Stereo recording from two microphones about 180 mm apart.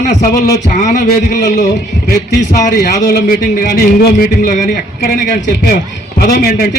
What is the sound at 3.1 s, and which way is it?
A man's voice, 55° left (ahead or behind).